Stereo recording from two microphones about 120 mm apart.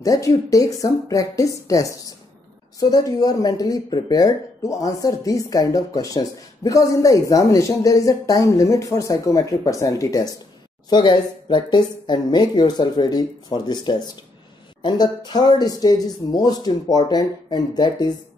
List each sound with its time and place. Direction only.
0.0 s a woman's voice: 30° left (ahead or behind)